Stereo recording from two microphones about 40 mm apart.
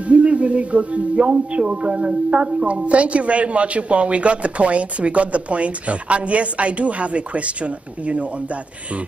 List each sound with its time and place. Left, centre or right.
0.0 s a man's voice: right